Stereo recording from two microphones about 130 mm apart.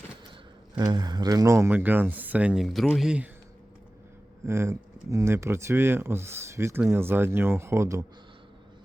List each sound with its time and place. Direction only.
0.8 s speech: 30° right (ahead or behind); by 3.2 s 5° right (ahead or behind)
4.4 s speech: 20° right (ahead or behind)